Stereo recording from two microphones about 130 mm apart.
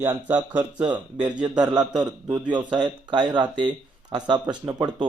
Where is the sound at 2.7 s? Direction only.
35° right (ahead or behind).